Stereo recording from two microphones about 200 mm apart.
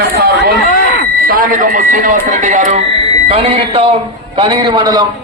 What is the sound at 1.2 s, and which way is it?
A man's voice, 45° right (ahead or behind).